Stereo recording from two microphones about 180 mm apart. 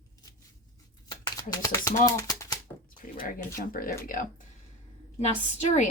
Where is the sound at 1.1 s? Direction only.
20° left (ahead or behind).